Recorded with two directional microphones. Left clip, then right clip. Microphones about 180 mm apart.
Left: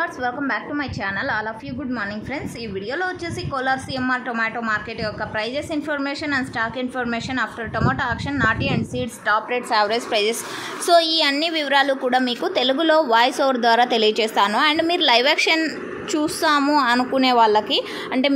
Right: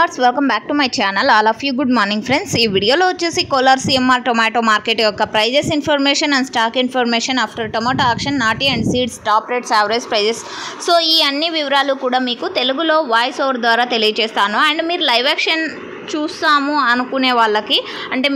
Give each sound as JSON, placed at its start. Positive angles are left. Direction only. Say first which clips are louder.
{"t": 0.0, "sound": "a woman's voice", "louder": "right 10 dB", "side_deg": -45}